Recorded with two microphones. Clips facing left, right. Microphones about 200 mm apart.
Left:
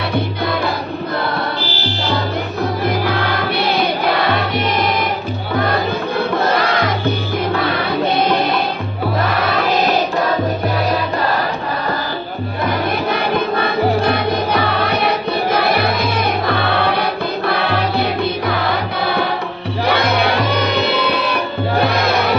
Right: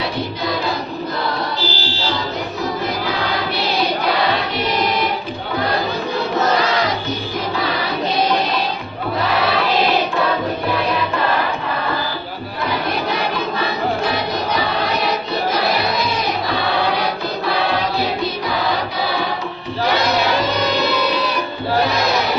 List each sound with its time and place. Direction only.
0.4 s music: 55° left (ahead or behind)
2.8 s music: 55° left (ahead or behind)
13.1 s music: 55° left (ahead or behind)